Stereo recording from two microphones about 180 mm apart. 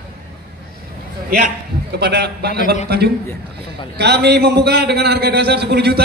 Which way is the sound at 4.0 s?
65° right (ahead or behind).